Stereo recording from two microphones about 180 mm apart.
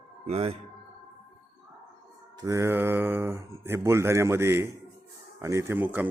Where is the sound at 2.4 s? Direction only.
15° right (ahead or behind).